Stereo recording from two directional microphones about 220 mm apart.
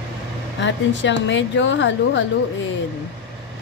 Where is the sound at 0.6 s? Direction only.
55° left (ahead or behind).